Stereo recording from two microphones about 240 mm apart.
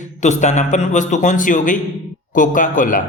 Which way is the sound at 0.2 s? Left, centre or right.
Left.